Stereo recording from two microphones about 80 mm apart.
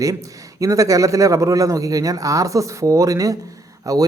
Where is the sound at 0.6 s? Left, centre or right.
Right.